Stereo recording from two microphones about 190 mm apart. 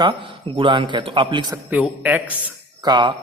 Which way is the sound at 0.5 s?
25° right (ahead or behind).